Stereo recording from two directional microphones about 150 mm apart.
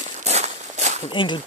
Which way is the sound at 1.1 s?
35° left (ahead or behind).